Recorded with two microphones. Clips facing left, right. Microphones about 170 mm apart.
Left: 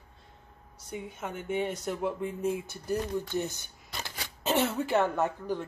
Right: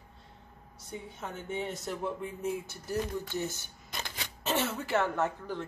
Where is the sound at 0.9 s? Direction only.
15° left (ahead or behind).